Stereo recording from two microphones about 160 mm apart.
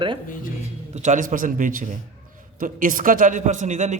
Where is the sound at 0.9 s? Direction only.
50° right (ahead or behind).